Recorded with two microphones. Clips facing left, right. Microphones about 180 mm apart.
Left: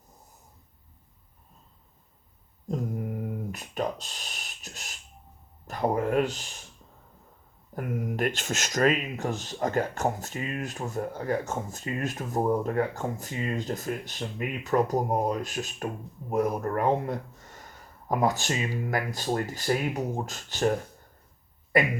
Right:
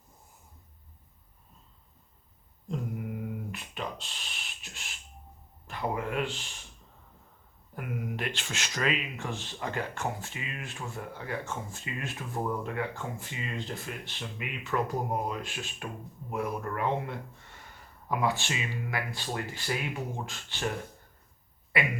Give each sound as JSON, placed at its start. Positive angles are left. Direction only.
{"t": 2.6, "sound": "mantra", "side_deg": 40}
{"t": 3.5, "sound": "speech", "side_deg": 40}
{"t": 7.8, "sound": "speech", "side_deg": 40}
{"t": 21.7, "sound": "speech", "side_deg": 40}